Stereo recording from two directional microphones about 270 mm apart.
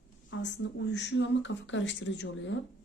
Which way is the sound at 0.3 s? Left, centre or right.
Left.